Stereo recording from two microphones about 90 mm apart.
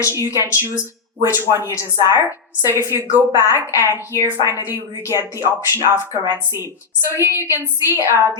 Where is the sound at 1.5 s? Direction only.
35° right (ahead or behind).